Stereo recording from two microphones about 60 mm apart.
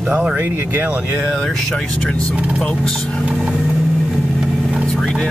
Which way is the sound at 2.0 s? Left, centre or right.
Centre.